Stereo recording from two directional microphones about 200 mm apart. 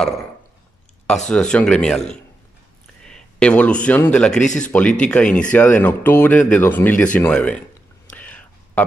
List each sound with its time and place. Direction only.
1.0 s a man's voice: 5° left (ahead or behind)
4.4 s speech: 40° left (ahead or behind)
4.6 s speech: 5° left (ahead or behind)
8.2 s whispering: 5° left (ahead or behind)